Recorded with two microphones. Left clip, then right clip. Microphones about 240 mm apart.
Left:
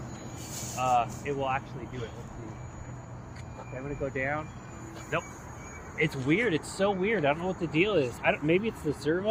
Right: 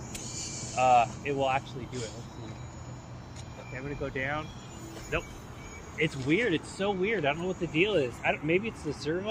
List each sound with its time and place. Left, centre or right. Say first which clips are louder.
0.8 s speech: right 4 dB; right
4.0 s speech: left 2 dB; centre
5.1 s speech: left 1 dB; left